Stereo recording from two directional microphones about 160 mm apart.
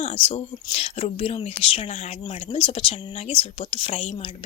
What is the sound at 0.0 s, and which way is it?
Speech, 35° left (ahead or behind).